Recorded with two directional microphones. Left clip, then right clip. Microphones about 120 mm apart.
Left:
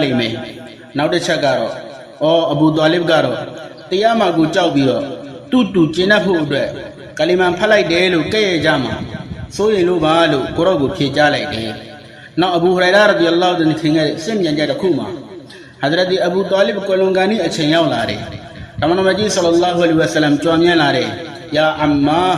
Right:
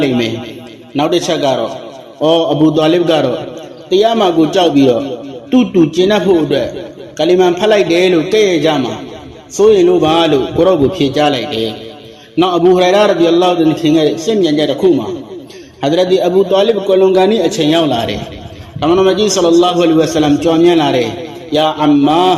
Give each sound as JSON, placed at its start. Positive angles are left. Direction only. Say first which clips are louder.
{"t": 0.0, "sound": "a man's voice", "louder": "right 3 dB", "side_deg": -15}
{"t": 0.9, "sound": "a man's voice", "louder": "right 3 dB", "side_deg": -25}
{"t": 2.2, "sound": "a man's voice", "louder": "right 3 dB", "side_deg": -15}
{"t": 3.8, "sound": "a man's voice", "louder": "right 3 dB", "side_deg": -25}
{"t": 5.5, "sound": "a man's voice", "louder": "right 3 dB", "side_deg": 0}
{"t": 6.1, "sound": "a man's voice", "louder": "right 3 dB", "side_deg": -15}
{"t": 9.6, "sound": "a man's voice", "louder": "right 6 dB", "side_deg": -25}
{"t": 13.8, "sound": "a man's voice", "louder": "right 5 dB", "side_deg": -25}
{"t": 15.8, "sound": "a man's voice", "louder": "right 3 dB", "side_deg": -10}
{"t": 20.5, "sound": "a man's voice", "louder": "right 2 dB", "side_deg": -5}
{"t": 21.5, "sound": "a man's voice", "louder": "right 3 dB", "side_deg": -30}